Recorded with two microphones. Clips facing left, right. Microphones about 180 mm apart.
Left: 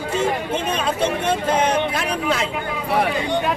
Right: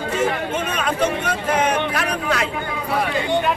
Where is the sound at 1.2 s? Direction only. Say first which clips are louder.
Left 1 dB; 25° left (ahead or behind).